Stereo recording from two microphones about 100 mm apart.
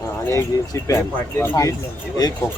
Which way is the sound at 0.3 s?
35° left (ahead or behind).